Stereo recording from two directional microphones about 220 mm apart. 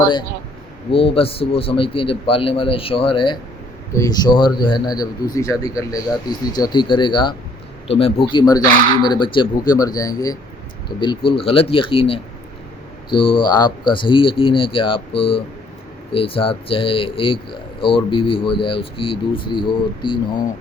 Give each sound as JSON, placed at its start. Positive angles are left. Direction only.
{"t": 0.9, "sound": "a man's voice", "side_deg": 25}